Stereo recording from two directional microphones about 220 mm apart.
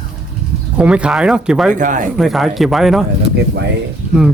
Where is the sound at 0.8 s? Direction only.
5° right (ahead or behind).